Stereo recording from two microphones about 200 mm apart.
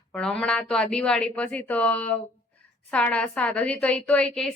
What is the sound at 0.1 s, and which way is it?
A woman's voice, 5° left (ahead or behind).